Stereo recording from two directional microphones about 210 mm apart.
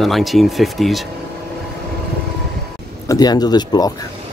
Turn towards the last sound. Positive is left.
turn(degrees=20)  # may be behind; listen again after turning